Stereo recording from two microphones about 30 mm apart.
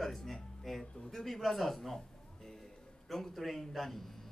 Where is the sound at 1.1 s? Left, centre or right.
Centre.